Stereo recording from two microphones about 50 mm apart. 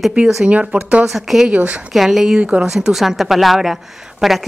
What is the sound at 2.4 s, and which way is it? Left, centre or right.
Speech, right.